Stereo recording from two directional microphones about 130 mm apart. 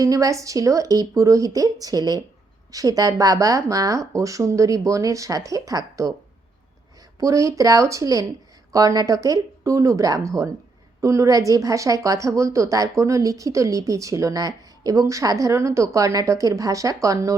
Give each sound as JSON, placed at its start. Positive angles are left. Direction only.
{"t": 0.0, "sound": "a woman's voice", "side_deg": -25}
{"t": 7.2, "sound": "a woman's voice", "side_deg": -25}